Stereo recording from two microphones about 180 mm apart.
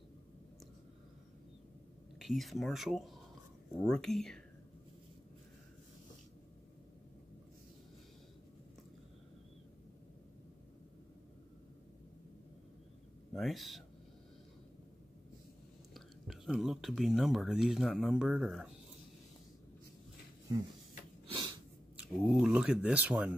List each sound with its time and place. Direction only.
2.1 s speech: centre (ahead or behind)
13.3 s speech: centre (ahead or behind)
15.9 s speech: centre (ahead or behind)
21.3 s a sound: 25° right (ahead or behind)
21.9 s speech: 5° right (ahead or behind)